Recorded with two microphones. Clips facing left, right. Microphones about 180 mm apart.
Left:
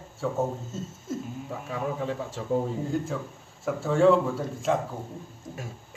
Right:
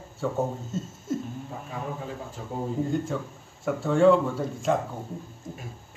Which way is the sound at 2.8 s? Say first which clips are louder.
Right 2 dB; centre (ahead or behind).